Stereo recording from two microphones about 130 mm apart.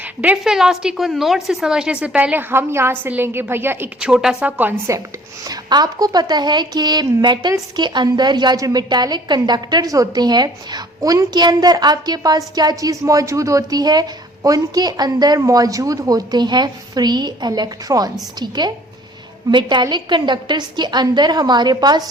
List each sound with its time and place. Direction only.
0.0 s a woman's voice: 10° right (ahead or behind)
4.1 s a woman's voice: 5° right (ahead or behind)
5.5 s a woman's voice: 30° right (ahead or behind)